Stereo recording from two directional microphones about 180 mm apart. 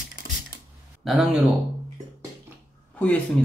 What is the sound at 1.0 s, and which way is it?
Speech, centre (ahead or behind).